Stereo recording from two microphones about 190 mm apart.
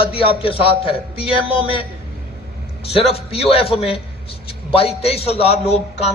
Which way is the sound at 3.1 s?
30° left (ahead or behind).